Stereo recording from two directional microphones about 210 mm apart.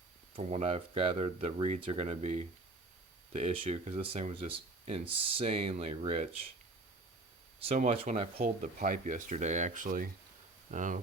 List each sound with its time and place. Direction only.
0.3 s speech: 30° right (ahead or behind)
7.7 s speech: 30° right (ahead or behind)